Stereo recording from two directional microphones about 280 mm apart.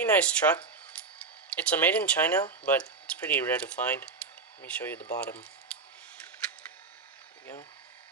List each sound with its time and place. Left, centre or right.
0.0 s speech: centre